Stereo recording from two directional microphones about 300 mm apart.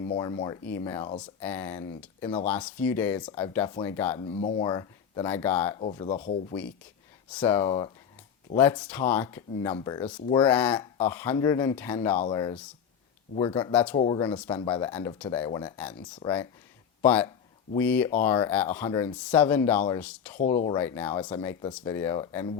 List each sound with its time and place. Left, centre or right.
0.2 s speech: centre
5.8 s speech: centre
7.3 s speech: centre
20.4 s speech: left
20.7 s speech: centre